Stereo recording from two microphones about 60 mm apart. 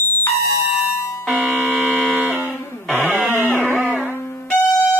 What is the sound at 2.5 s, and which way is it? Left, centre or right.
Music, left.